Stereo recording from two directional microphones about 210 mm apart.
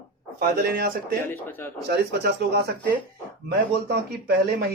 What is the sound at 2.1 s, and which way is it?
Speech, 50° right (ahead or behind).